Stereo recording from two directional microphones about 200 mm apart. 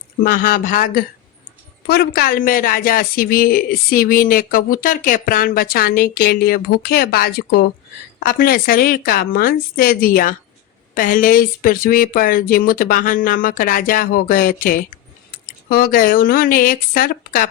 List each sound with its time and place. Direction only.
0.2 s speech: 45° left (ahead or behind)